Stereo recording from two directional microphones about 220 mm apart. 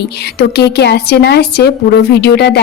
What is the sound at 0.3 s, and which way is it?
A woman's voice, 50° left (ahead or behind).